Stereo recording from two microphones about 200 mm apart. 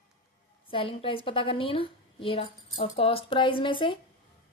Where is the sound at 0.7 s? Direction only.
25° left (ahead or behind).